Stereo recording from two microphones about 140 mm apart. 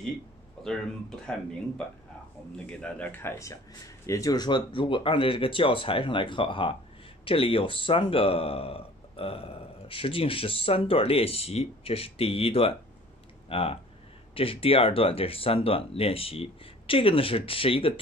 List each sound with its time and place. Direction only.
0.7 s speech: 5° left (ahead or behind)
2.6 s speech: 10° left (ahead or behind); by 18.0 s 40° left (ahead or behind)